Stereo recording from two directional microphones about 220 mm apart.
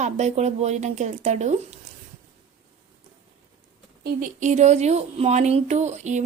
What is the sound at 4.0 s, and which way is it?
Speech, 35° right (ahead or behind).